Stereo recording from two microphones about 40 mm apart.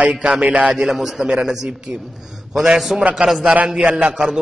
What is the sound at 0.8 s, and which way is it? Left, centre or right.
Speech, centre.